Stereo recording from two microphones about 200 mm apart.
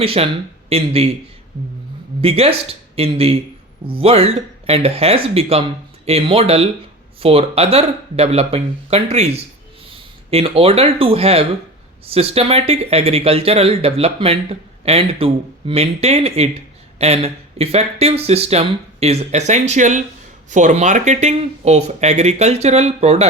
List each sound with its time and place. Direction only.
0.0 s speech: 30° right (ahead or behind)
2.2 s speech: 30° right (ahead or behind)